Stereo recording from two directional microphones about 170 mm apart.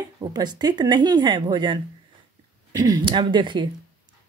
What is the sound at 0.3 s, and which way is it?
Speech, 25° right (ahead or behind).